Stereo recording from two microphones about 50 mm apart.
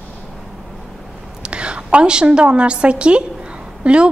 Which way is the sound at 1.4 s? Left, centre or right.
Right.